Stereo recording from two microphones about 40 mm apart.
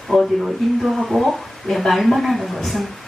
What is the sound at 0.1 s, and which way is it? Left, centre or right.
Speech, left.